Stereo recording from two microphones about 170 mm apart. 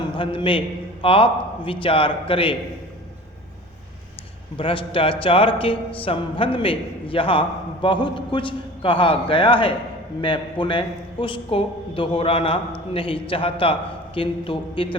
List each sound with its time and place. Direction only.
0.2 s a man's voice: 30° left (ahead or behind)
4.5 s a man's voice: 30° left (ahead or behind)